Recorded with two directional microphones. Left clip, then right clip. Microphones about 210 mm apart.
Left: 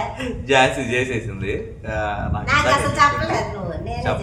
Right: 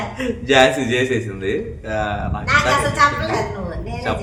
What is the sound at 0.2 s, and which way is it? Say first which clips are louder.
A man's voice: right 3 dB; 20° right (ahead or behind).